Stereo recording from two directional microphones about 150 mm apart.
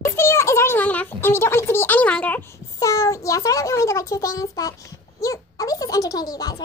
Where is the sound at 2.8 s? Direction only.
20° left (ahead or behind).